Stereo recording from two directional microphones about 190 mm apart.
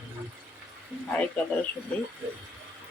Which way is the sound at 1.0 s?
5° left (ahead or behind).